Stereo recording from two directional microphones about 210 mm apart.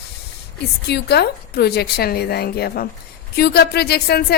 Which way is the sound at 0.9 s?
50° left (ahead or behind).